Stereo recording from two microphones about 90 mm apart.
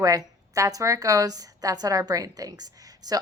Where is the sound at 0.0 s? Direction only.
40° right (ahead or behind).